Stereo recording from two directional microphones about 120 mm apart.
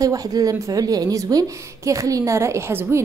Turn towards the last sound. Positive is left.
turn(degrees=-20)  # may be behind; listen again after turning